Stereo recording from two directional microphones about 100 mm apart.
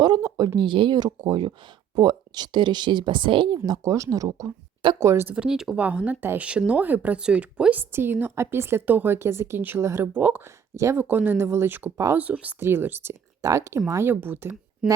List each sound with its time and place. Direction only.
0.0 s speech: 40° right (ahead or behind); by 3.6 s 55° right (ahead or behind)
3.7 s speech: 35° right (ahead or behind)
5.3 s speech: 10° right (ahead or behind)
6.1 s speech: 15° right (ahead or behind)
10.8 s speech: 30° right (ahead or behind)
11.0 s speech: 15° right (ahead or behind)
13.4 s speech: 30° right (ahead or behind)